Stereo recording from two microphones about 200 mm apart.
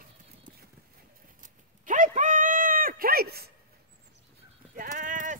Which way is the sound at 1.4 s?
40° right (ahead or behind).